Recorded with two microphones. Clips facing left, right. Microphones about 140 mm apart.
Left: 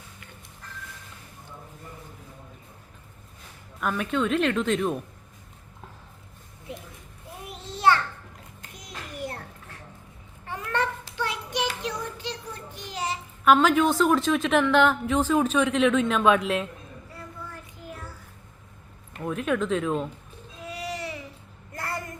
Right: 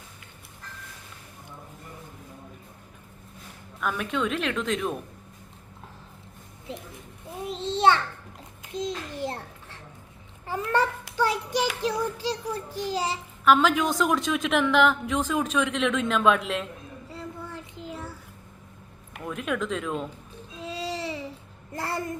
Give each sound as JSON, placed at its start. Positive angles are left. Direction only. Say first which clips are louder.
{"t": 3.8, "sound": "speech", "louder": "left 2 dB", "side_deg": 0}
{"t": 7.4, "sound": "a sound", "louder": "right 2 dB", "side_deg": -25}
{"t": 10.4, "sound": "babbling", "louder": "right 3 dB", "side_deg": -30}
{"t": 11.2, "sound": "a sound", "louder": "right 4 dB", "side_deg": -35}
{"t": 13.4, "sound": "speech", "louder": "left 2 dB", "side_deg": 0}
{"t": 17.1, "sound": "child singing", "louder": "right 4 dB", "side_deg": -25}
{"t": 19.2, "sound": "speech", "louder": "left 3 dB", "side_deg": 0}
{"t": 20.6, "sound": "baby cry", "louder": "right 2 dB", "side_deg": -25}
{"t": 21.8, "sound": "a sound", "louder": "right 3 dB", "side_deg": -25}